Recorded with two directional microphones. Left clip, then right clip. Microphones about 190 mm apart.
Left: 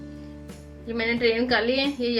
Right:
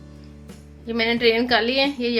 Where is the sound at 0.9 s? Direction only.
45° right (ahead or behind).